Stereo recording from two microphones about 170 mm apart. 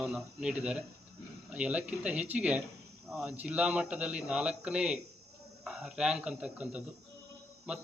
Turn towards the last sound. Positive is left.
turn(degrees=-5)  # may be behind; listen again after turning